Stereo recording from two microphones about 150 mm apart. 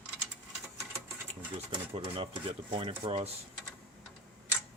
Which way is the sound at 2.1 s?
35° right (ahead or behind).